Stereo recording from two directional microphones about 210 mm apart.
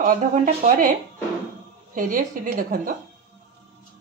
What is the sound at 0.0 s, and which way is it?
Speech, 40° right (ahead or behind).